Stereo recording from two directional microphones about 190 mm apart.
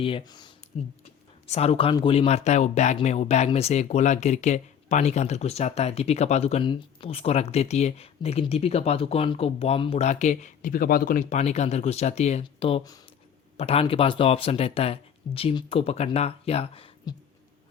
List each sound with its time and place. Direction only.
0.0 s speech: 25° left (ahead or behind)
0.7 s speech: 35° left (ahead or behind)